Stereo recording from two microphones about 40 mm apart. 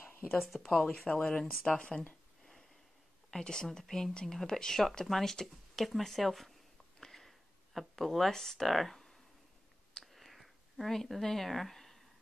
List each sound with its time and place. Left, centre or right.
0.3 s speech: centre
1.0 s speech: centre
1.4 s speech: centre
1.8 s speech: left
3.3 s speech: centre
7.0 s a sound: centre